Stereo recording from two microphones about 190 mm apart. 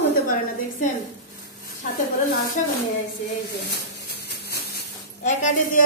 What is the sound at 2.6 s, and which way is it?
Speech, 40° left (ahead or behind).